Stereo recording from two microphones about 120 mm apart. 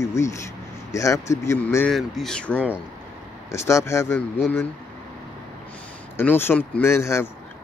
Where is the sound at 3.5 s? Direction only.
25° left (ahead or behind).